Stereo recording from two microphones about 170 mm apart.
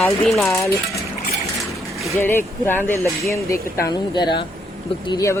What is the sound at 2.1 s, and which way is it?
Speech, 15° left (ahead or behind).